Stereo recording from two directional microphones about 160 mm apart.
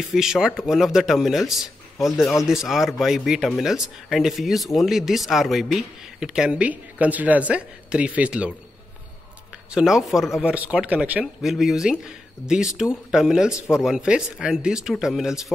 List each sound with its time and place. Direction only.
0.0 s speech: centre (ahead or behind)
9.7 s speech: 5° right (ahead or behind)